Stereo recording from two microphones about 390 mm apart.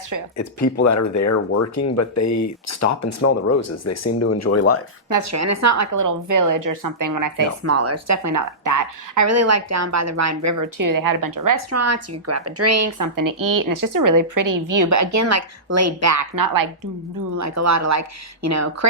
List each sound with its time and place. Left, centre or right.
0.3 s speech: left
5.0 s speech: right
7.6 s speech: right
11.7 s speech: right
17.3 s a woman's voice: right